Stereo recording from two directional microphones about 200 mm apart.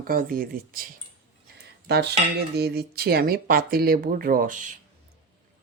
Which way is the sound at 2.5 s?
50° right (ahead or behind).